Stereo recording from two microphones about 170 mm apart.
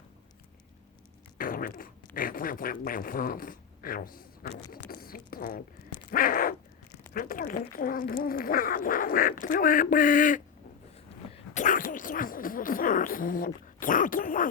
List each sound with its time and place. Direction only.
1.4 s speech: 55° left (ahead or behind)
6.1 s a sound: 55° left (ahead or behind)
7.1 s speech: 55° left (ahead or behind)
11.5 s speech: 50° left (ahead or behind)